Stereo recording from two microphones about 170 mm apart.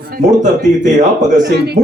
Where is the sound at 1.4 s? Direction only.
90° right.